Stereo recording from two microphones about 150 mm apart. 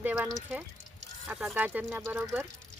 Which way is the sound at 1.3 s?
5° right (ahead or behind).